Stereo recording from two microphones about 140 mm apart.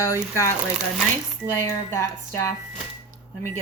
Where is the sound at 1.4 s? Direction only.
20° left (ahead or behind).